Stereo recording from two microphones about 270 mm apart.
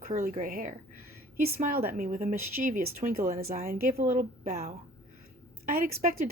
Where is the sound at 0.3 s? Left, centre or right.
Right.